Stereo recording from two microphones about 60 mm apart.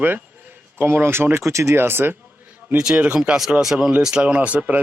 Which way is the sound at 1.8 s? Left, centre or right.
Right.